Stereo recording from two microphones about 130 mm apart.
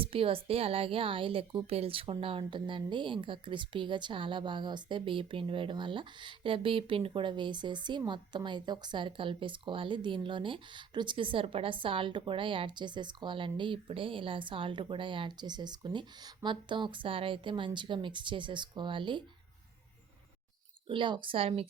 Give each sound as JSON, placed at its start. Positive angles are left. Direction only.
{"t": 0.0, "sound": "a woman's voice", "side_deg": -45}
{"t": 20.8, "sound": "a woman's voice", "side_deg": -40}